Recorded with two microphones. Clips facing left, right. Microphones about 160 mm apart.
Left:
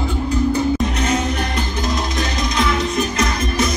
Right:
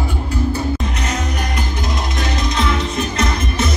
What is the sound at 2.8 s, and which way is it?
Music, 25° right (ahead or behind).